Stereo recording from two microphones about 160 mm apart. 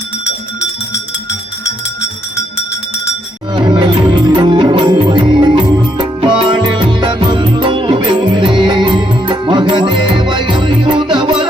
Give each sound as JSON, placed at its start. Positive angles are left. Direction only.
{"t": 3.5, "sound": "music", "side_deg": -30}